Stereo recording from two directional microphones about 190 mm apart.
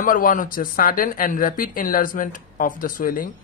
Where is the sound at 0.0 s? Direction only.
45° left (ahead or behind).